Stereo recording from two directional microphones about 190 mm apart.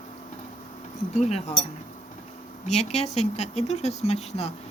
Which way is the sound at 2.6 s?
35° left (ahead or behind).